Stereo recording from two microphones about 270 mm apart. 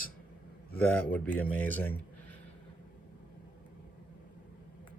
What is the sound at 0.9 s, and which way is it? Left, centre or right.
Speech, centre.